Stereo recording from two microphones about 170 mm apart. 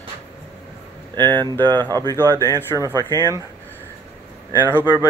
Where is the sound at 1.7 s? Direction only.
25° right (ahead or behind).